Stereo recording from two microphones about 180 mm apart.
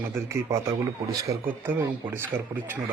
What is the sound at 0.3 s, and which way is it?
A man's voice, 15° right (ahead or behind).